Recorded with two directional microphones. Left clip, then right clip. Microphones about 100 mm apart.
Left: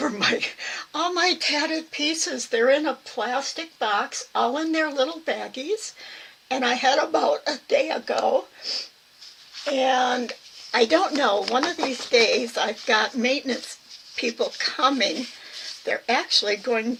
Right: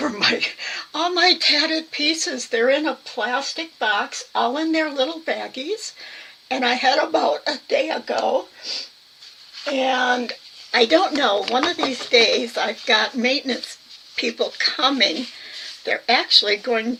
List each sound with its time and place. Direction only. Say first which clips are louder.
0.0 s speech: right 3 dB; 30° left (ahead or behind)